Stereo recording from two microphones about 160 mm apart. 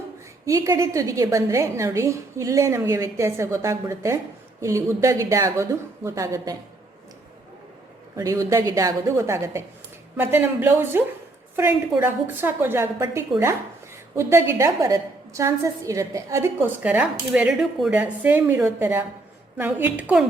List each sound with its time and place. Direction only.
0.4 s a woman's voice: 20° right (ahead or behind)
8.1 s a woman's voice: 20° right (ahead or behind)